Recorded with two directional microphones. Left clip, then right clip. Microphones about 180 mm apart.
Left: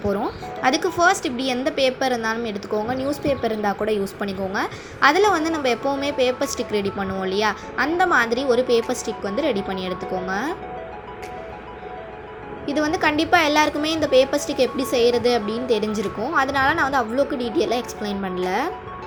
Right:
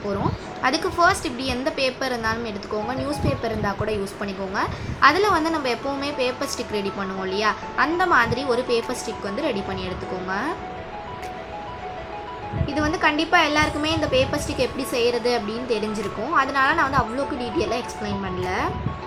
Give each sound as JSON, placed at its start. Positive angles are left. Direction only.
{"t": 0.6, "sound": "speech", "side_deg": 25}
{"t": 12.6, "sound": "speech", "side_deg": 25}